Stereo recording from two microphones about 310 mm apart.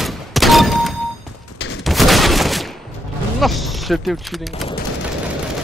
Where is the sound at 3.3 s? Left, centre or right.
Centre.